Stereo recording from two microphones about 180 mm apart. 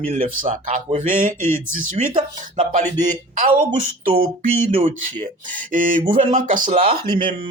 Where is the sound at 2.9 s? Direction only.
25° right (ahead or behind).